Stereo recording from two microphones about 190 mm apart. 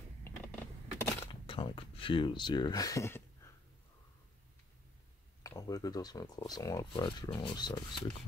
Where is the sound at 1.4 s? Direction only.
25° left (ahead or behind).